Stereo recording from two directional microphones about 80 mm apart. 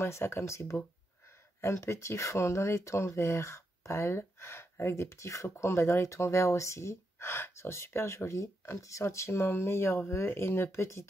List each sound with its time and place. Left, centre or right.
0.0 s speech: left